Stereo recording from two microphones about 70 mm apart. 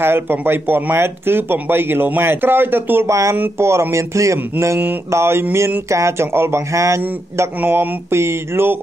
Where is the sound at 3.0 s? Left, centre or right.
Right.